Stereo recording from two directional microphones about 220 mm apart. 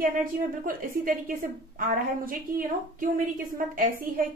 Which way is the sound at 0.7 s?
40° right (ahead or behind).